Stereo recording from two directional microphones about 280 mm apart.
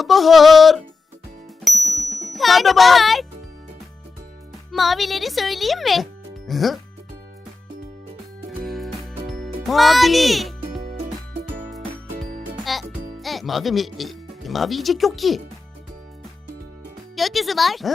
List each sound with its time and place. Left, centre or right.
0.0 s a child's voice: centre
1.9 s speech: centre
4.7 s a child's voice: centre
8.4 s music: centre
12.6 s music: centre
17.2 s a child's voice: centre